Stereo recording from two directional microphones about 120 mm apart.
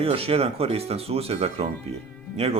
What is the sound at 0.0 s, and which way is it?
Speech, 55° right (ahead or behind).